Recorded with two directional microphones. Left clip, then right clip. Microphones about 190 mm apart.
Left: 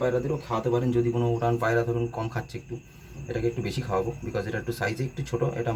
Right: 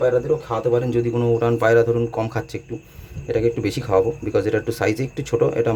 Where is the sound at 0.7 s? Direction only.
40° right (ahead or behind).